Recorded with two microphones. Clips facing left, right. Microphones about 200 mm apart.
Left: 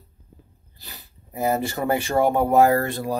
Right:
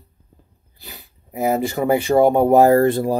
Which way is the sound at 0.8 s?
15° right (ahead or behind).